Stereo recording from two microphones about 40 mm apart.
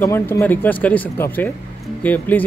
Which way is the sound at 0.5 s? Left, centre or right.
Left.